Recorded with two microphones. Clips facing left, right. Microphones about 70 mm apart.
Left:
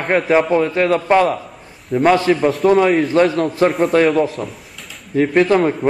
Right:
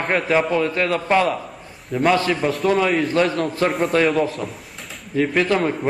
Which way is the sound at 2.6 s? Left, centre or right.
Left.